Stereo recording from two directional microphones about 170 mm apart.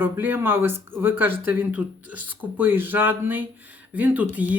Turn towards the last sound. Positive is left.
turn(degrees=-10)  # may be behind; listen again after turning